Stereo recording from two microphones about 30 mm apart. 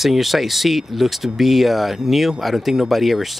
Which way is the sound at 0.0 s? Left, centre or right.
Centre.